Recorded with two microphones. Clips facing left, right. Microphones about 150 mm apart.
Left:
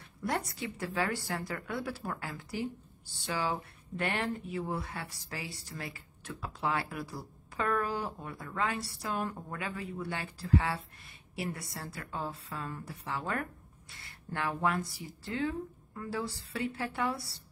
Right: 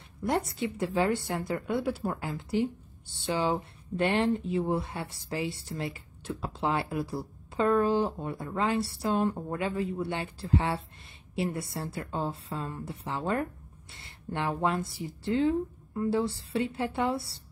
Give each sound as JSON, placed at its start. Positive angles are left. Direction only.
{"t": 0.2, "sound": "a woman's voice", "side_deg": -25}